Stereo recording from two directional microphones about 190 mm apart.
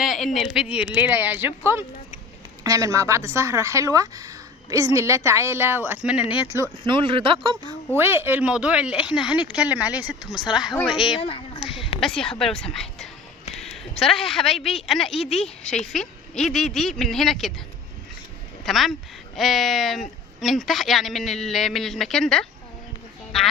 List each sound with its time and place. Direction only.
0.0 s a sound: centre (ahead or behind)
0.3 s a woman's voice: 5° right (ahead or behind)
6.8 s speech: 25° right (ahead or behind)
7.9 s a woman's voice: 10° right (ahead or behind)
11.0 s speech: 30° left (ahead or behind)
11.9 s a woman's voice: 5° left (ahead or behind)
18.6 s a woman's voice: centre (ahead or behind)